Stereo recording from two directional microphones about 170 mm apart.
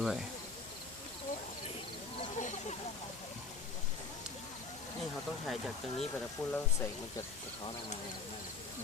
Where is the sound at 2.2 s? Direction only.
45° left (ahead or behind).